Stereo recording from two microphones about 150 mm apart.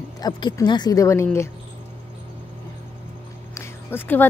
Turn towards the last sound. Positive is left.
turn(degrees=15)  # may be behind; listen again after turning